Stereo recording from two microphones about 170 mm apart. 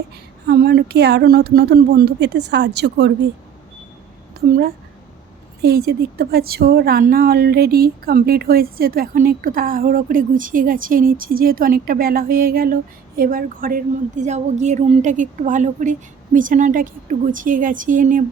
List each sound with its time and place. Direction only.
0.4 s speech: 70° right (ahead or behind); by 3.1 s 90° right
4.4 s a woman's voice: 60° right (ahead or behind)